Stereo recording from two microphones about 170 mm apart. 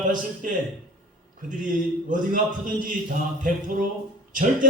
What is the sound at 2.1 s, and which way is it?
A man's voice, 50° right (ahead or behind).